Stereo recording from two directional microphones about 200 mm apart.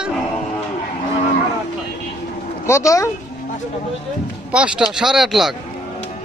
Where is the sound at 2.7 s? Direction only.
15° left (ahead or behind).